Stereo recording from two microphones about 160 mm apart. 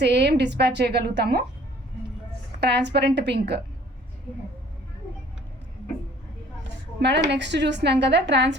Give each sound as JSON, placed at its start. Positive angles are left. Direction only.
{"t": 0.0, "sound": "a woman's voice", "side_deg": -90}
{"t": 2.6, "sound": "a woman's voice", "side_deg": -90}
{"t": 7.0, "sound": "a woman's voice", "side_deg": -90}